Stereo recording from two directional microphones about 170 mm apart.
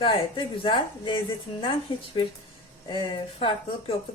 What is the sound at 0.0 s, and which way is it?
A woman's voice, 30° left (ahead or behind).